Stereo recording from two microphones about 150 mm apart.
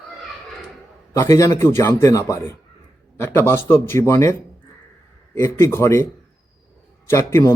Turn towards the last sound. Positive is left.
turn(degrees=20)  # may be behind; listen again after turning